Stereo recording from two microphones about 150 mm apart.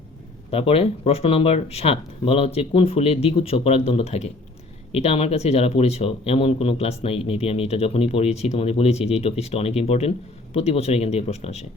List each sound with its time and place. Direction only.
0.5 s speech: 40° left (ahead or behind)